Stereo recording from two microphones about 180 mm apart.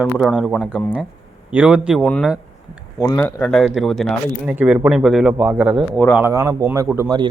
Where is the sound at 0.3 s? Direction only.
Centre (ahead or behind).